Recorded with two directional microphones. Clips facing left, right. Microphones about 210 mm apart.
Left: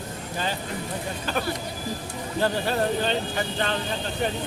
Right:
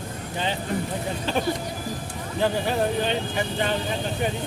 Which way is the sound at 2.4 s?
15° right (ahead or behind).